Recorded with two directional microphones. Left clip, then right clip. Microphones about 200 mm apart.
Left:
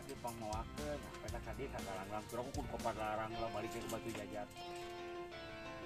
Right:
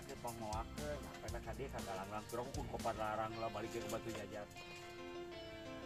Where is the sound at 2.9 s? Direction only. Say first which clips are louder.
Even; 50° left (ahead or behind).